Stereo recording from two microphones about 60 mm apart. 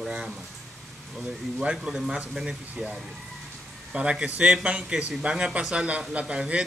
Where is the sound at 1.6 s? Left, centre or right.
Centre.